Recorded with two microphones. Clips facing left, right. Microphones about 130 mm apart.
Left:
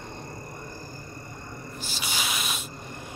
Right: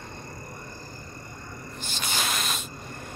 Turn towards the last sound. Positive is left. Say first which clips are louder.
# even
turn(degrees=5)  # may be behind; listen again after turning